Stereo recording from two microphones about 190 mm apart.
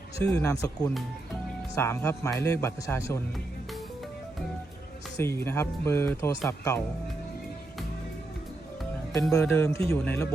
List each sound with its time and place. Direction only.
0.3 s speech: 15° left (ahead or behind)
5.2 s speech: 15° left (ahead or behind)
9.3 s speech: 10° left (ahead or behind)